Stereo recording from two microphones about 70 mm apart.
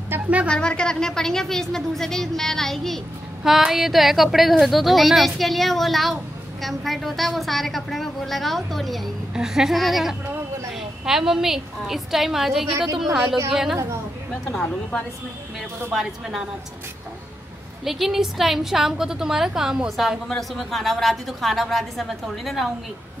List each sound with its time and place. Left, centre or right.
0.1 s music: right
0.5 s a woman's voice: centre
14.4 s a woman's voice: centre
15.9 s a woman's voice: centre
17.8 s a woman's voice: centre
20.2 s a woman's voice: centre